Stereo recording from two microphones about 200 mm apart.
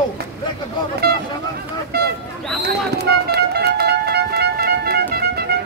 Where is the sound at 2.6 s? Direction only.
55° right (ahead or behind).